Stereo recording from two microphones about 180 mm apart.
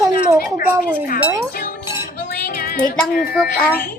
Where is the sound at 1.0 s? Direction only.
50° left (ahead or behind).